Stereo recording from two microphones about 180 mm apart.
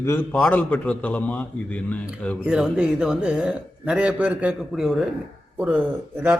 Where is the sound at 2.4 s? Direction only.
5° right (ahead or behind).